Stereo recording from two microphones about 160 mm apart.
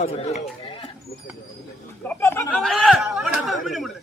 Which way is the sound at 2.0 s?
15° left (ahead or behind).